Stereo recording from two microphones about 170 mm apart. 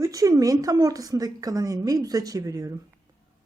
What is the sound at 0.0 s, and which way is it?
A woman's voice, 20° right (ahead or behind).